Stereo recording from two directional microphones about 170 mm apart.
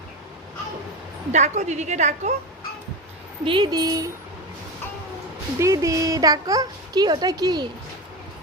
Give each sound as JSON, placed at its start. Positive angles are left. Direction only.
{"t": 1.3, "sound": "a woman's voice", "side_deg": -40}
{"t": 3.4, "sound": "a child's voice", "side_deg": -30}
{"t": 5.5, "sound": "a child's voice", "side_deg": -20}